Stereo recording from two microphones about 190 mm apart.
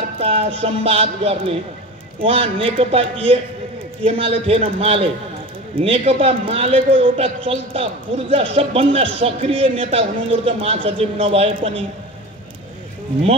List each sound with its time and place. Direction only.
0.2 s a man's voice: 30° right (ahead or behind)